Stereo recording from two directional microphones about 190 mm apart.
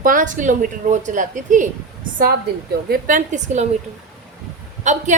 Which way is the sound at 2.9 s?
45° right (ahead or behind).